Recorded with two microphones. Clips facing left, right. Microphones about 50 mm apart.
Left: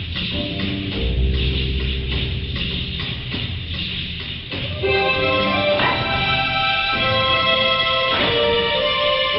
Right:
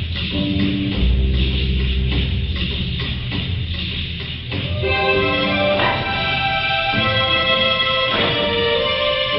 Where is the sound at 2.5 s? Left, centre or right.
Right.